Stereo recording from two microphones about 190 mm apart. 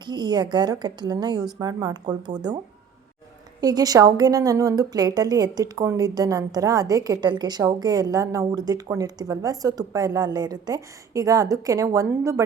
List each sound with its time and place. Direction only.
0.0 s a woman's voice: 25° right (ahead or behind)
3.6 s a woman's voice: 20° right (ahead or behind)